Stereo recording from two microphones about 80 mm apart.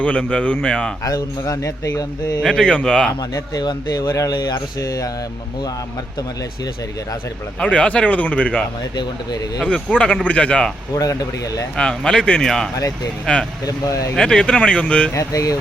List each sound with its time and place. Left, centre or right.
0.0 s speech: centre
1.0 s speech: left
2.4 s speech: centre
3.5 s speech: left
4.8 s speech: left
7.6 s speech: centre
9.9 s speech: centre
10.9 s speech: left
11.8 s speech: centre
13.7 s speech: left
14.2 s speech: centre
15.1 s speech: left